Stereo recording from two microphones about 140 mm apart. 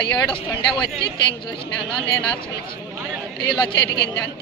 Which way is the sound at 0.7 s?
Centre (ahead or behind).